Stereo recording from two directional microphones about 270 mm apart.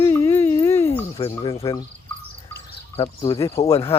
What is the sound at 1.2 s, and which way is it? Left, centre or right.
Speech, left.